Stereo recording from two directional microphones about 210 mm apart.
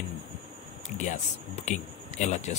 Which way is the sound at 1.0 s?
35° left (ahead or behind).